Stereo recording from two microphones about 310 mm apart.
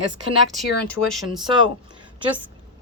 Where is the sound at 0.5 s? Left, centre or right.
Centre.